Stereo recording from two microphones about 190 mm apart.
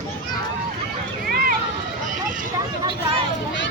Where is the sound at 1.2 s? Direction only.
50° right (ahead or behind).